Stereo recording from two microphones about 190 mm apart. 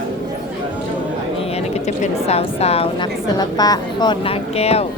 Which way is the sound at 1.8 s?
35° left (ahead or behind).